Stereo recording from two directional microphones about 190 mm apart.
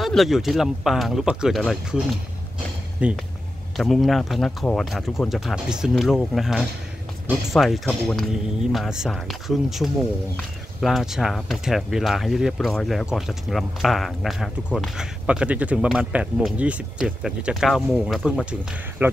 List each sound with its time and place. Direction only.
0.0 s speech: centre (ahead or behind)
3.0 s speech: 5° right (ahead or behind)